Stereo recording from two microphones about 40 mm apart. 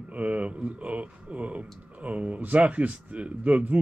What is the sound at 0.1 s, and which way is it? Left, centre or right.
A man's voice, right.